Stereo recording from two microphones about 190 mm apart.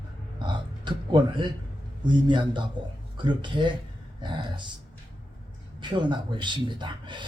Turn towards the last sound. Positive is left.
turn(degrees=-25)  # may be behind; listen again after turning